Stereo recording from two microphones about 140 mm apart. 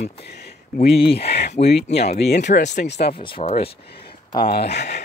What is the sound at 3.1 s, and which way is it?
Speech, 40° left (ahead or behind).